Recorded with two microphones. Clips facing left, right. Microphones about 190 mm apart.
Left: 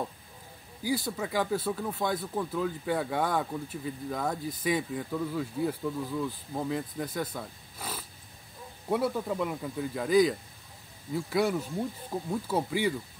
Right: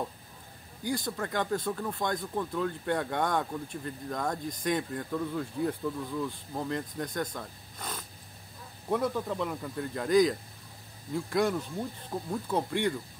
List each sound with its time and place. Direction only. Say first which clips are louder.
0.8 s speech: left 2 dB; 5° left (ahead or behind)